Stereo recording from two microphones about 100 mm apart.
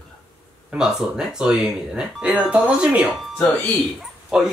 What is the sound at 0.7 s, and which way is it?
Speech, 5° right (ahead or behind).